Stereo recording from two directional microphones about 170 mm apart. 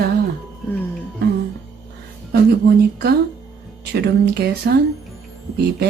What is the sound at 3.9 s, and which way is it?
Speech, 70° right (ahead or behind).